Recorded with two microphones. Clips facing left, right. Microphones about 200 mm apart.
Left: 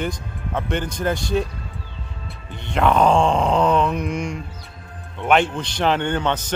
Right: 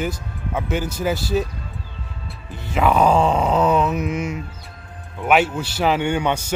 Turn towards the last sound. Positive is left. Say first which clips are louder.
# right 1 dB
turn(degrees=-10)  # may be behind; listen again after turning